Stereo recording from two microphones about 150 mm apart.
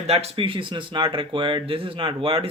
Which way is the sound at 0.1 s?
40° right (ahead or behind).